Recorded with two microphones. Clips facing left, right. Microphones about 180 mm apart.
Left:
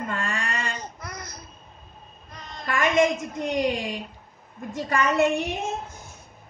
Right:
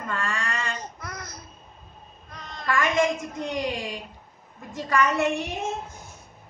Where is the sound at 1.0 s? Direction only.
5° right (ahead or behind).